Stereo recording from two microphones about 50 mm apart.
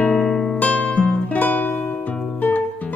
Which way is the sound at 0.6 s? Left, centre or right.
Left.